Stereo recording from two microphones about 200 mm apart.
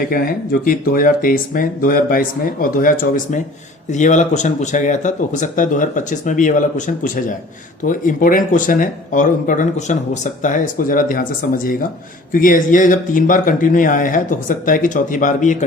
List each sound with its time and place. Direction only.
0.0 s speech: 45° left (ahead or behind)